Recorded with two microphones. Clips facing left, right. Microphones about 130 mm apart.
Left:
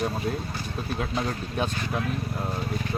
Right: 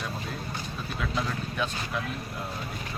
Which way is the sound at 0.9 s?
35° left (ahead or behind).